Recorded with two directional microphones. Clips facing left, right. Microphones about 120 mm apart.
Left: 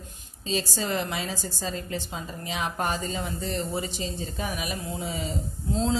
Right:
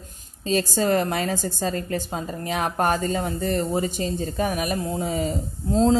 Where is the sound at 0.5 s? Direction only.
50° right (ahead or behind).